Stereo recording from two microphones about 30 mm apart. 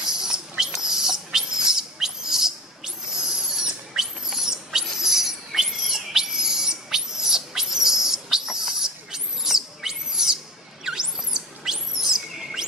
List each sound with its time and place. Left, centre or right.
0.0 s rodents: centre